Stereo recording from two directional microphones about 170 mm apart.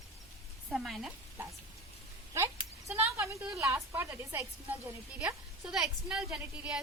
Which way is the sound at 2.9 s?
10° right (ahead or behind).